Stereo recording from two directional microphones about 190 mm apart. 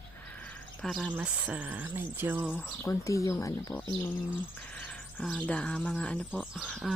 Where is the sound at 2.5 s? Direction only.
10° left (ahead or behind).